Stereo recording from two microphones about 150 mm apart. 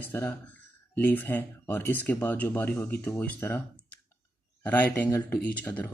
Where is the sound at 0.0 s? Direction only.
10° left (ahead or behind).